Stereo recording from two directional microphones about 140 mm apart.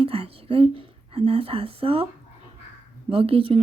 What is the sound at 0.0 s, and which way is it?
Speech, 40° right (ahead or behind).